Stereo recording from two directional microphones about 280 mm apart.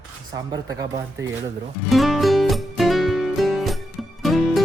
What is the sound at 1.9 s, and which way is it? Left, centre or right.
Music, centre.